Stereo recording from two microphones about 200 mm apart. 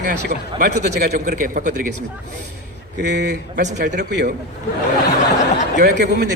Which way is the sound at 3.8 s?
60° right (ahead or behind).